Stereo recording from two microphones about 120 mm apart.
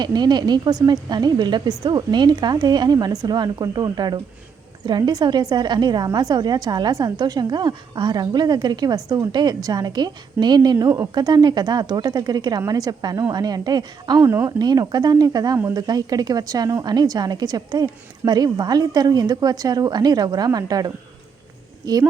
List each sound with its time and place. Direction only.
0.0 s a woman's voice: 35° right (ahead or behind)
14.3 s speech: 20° right (ahead or behind)
14.6 s a woman's voice: 35° right (ahead or behind)